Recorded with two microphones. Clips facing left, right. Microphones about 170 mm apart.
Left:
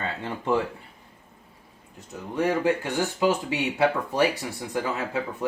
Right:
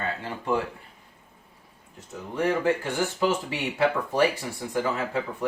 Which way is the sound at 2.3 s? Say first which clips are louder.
Left 1 dB; 15° left (ahead or behind).